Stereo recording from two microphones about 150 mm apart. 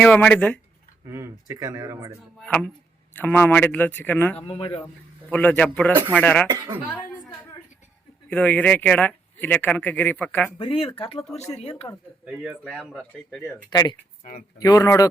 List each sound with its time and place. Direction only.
0.0 s speech: 10° left (ahead or behind)
1.1 s speech: 25° right (ahead or behind)
3.2 s speech: 10° left (ahead or behind)
4.4 s speech: 40° left (ahead or behind)
5.3 s speech: 10° left (ahead or behind)
8.3 s speech: 10° left (ahead or behind)
10.6 s speech: 35° left (ahead or behind)
12.2 s speech: 5° right (ahead or behind)
13.7 s speech: 30° left (ahead or behind)